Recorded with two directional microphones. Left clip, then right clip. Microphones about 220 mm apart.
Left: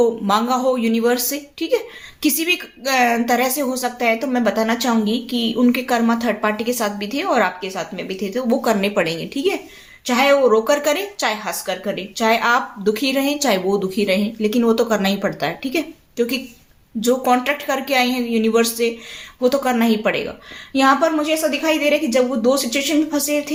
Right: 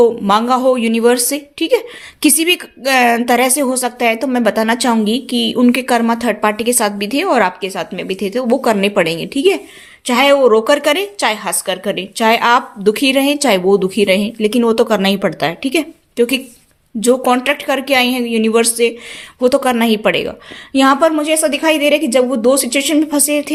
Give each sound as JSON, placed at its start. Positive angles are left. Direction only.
{"t": 0.0, "sound": "a woman's voice", "side_deg": -40}